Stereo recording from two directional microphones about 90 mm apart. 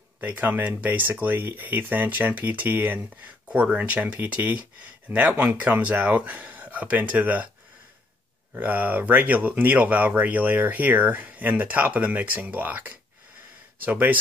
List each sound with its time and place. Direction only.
0.2 s speech: 15° right (ahead or behind)
8.5 s speech: 20° right (ahead or behind)